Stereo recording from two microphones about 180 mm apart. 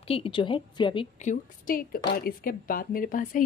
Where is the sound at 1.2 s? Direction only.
50° left (ahead or behind).